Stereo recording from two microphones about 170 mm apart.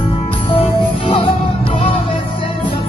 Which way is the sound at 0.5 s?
35° left (ahead or behind).